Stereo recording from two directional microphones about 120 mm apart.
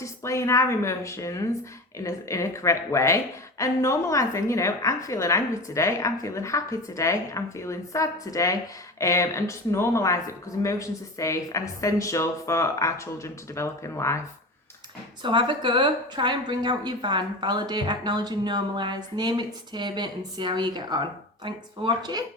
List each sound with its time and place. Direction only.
0.0 s a woman's voice: 25° left (ahead or behind)
15.2 s a woman's voice: 40° right (ahead or behind)